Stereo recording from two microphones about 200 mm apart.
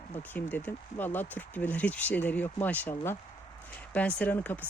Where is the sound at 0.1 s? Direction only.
10° left (ahead or behind).